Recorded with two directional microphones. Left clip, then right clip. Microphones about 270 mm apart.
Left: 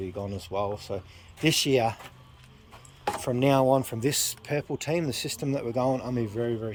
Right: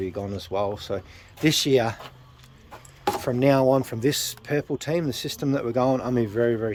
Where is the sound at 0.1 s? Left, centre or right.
Centre.